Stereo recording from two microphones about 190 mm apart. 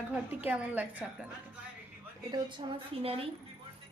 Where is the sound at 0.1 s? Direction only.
10° right (ahead or behind).